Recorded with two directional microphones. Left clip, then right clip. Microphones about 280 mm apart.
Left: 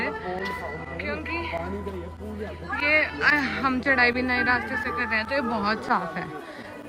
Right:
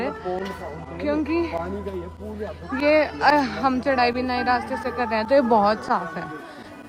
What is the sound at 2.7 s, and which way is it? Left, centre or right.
A woman's voice, centre.